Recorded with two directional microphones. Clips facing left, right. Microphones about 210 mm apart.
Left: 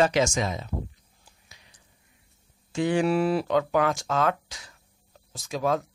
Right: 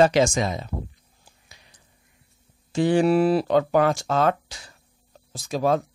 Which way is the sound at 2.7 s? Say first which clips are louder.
Right 4 dB; 35° right (ahead or behind).